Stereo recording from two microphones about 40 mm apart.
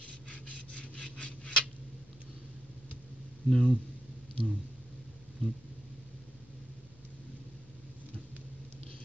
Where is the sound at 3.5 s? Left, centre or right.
Centre.